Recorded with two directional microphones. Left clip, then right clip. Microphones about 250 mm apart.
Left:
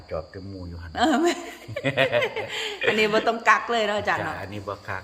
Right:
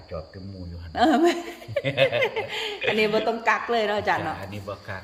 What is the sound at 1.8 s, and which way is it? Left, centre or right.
Speech, centre.